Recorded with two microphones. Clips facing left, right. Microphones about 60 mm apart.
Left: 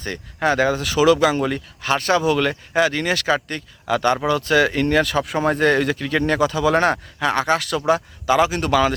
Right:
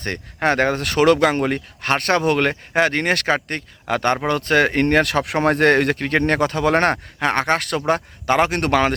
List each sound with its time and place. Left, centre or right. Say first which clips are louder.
0.3 s speech: even; right